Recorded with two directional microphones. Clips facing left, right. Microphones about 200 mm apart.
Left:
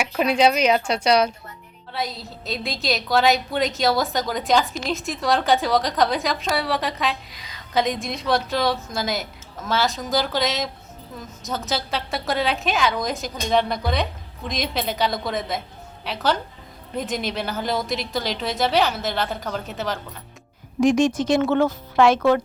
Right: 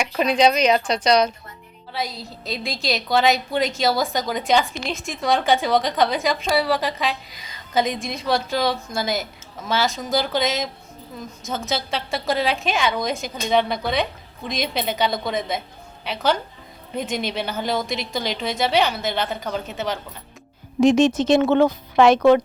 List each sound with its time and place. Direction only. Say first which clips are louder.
0.0 s a woman's voice: right 1 dB; 5° left (ahead or behind)
20.8 s a woman's voice: right 2 dB; 25° right (ahead or behind)